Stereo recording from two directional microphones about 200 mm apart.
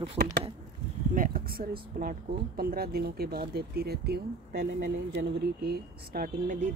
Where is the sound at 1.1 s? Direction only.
45° right (ahead or behind).